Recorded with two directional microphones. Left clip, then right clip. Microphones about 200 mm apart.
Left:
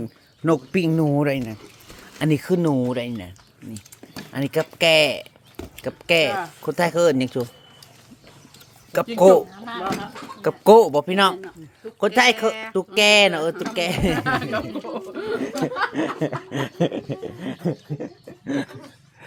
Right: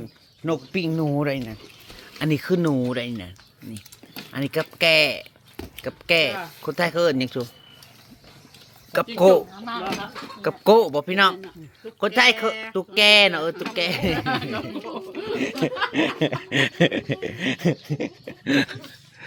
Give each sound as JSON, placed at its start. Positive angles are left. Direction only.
{"t": 0.4, "sound": "speech", "side_deg": 35}
{"t": 4.1, "sound": "a sound", "side_deg": 10}
{"t": 4.8, "sound": "speech", "side_deg": 15}
{"t": 9.1, "sound": "speech", "side_deg": 15}
{"t": 9.6, "sound": "speech", "side_deg": -10}
{"t": 10.4, "sound": "speech", "side_deg": 20}
{"t": 14.2, "sound": "speech", "side_deg": 55}
{"t": 15.1, "sound": "chatter", "side_deg": 30}
{"t": 16.0, "sound": "speech", "side_deg": -10}
{"t": 17.4, "sound": "speech", "side_deg": -20}